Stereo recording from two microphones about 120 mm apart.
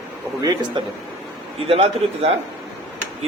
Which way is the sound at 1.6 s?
55° right (ahead or behind).